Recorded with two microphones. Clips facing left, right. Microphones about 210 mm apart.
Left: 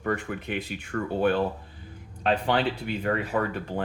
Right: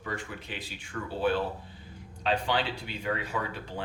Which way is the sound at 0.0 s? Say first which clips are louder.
Left 8 dB; 55° left (ahead or behind).